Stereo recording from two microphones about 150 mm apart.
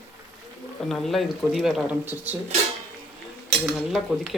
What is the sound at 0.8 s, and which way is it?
Speech, centre (ahead or behind).